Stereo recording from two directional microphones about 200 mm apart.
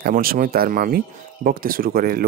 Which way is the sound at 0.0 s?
45° right (ahead or behind).